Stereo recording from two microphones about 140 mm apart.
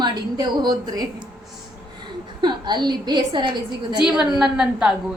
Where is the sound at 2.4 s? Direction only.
30° right (ahead or behind).